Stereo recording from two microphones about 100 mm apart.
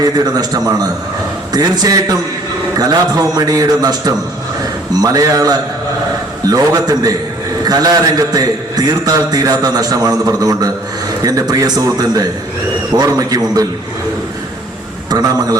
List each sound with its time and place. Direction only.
0.0 s a man's voice: 40° right (ahead or behind)
15.1 s a man's voice: 40° right (ahead or behind)